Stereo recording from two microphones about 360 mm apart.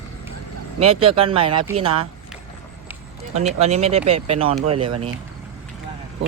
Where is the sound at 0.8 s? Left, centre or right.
Centre.